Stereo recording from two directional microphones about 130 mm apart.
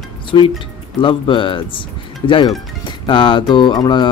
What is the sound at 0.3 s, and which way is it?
Speech, 35° left (ahead or behind).